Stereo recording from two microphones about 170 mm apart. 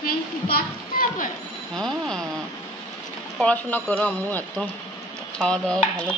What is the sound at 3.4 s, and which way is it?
A woman's voice, 10° left (ahead or behind).